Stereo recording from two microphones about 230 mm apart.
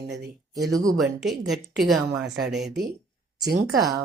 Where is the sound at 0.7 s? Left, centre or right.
Centre.